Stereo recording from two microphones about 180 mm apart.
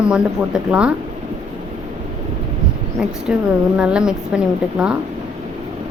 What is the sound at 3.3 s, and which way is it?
A woman's voice, 5° right (ahead or behind).